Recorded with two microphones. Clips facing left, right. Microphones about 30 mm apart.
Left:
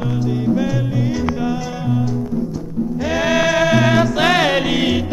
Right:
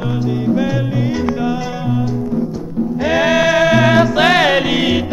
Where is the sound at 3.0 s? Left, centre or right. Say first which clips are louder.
Right 4 dB; centre.